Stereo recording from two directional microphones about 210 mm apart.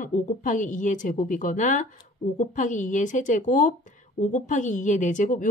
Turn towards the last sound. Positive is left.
turn(degrees=35)  # may be behind; listen again after turning